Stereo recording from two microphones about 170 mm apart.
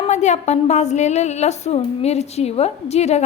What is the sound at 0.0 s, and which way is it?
A woman's voice, 45° left (ahead or behind).